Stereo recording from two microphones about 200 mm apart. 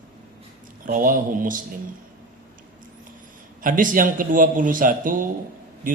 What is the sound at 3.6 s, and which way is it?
A man's voice, 45° right (ahead or behind).